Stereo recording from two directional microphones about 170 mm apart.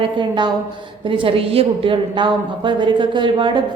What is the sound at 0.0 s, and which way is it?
A woman's voice, 25° right (ahead or behind).